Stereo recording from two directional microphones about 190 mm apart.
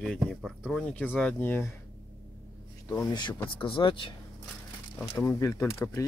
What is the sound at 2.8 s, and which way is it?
Speech, 20° left (ahead or behind).